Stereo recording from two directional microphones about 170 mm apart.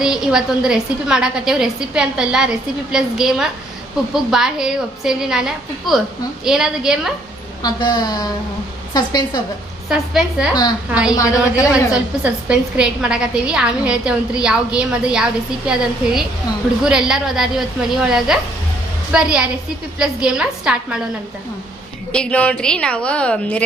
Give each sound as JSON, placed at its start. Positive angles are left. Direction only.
{"t": 0.0, "sound": "a woman's voice", "side_deg": -5}
{"t": 7.6, "sound": "a woman's voice", "side_deg": 25}
{"t": 9.9, "sound": "a woman's voice", "side_deg": -5}
{"t": 10.5, "sound": "a woman's voice", "side_deg": 25}
{"t": 11.9, "sound": "a woman's voice", "side_deg": -5}
{"t": 22.1, "sound": "a woman's voice", "side_deg": 5}